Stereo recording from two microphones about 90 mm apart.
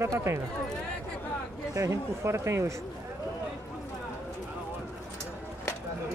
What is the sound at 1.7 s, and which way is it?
Speech, 35° right (ahead or behind).